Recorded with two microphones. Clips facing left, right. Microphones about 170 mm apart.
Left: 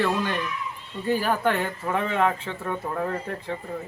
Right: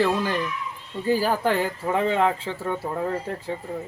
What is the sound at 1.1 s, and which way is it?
Speech, 35° right (ahead or behind).